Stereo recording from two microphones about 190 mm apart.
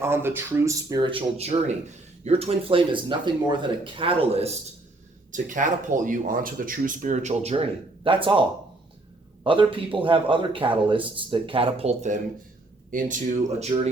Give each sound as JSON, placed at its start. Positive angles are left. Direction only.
{"t": 0.0, "sound": "speech", "side_deg": -10}
{"t": 5.3, "sound": "speech", "side_deg": -40}